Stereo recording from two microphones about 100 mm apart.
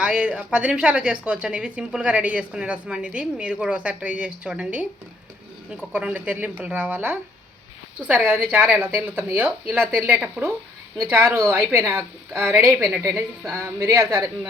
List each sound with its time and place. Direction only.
0.0 s a woman's voice: 15° right (ahead or behind)